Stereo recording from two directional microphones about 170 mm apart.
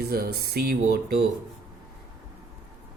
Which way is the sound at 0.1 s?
65° right (ahead or behind).